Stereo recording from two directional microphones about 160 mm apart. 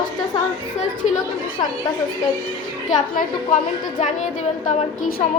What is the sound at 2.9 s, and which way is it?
A woman's voice, 55° left (ahead or behind).